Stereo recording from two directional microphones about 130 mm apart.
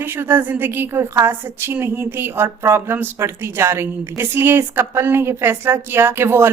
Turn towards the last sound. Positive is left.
turn(degrees=-20)  # may be behind; listen again after turning